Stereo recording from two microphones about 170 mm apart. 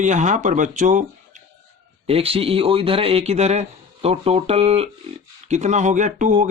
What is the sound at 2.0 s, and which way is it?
Speech, 35° right (ahead or behind).